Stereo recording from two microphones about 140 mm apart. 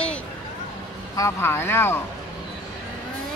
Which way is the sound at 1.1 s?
20° left (ahead or behind).